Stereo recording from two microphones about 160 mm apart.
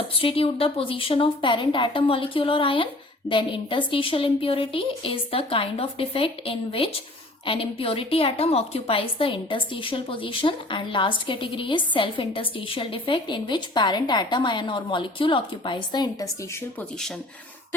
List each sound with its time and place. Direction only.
0.2 s a woman's voice: 35° left (ahead or behind)